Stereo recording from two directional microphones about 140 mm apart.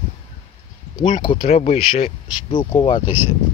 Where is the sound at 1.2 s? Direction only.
40° left (ahead or behind).